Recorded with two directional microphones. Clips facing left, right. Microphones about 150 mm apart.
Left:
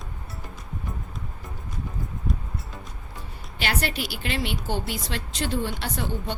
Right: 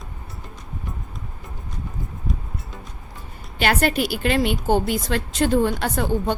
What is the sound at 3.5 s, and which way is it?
A woman's voice, 50° right (ahead or behind).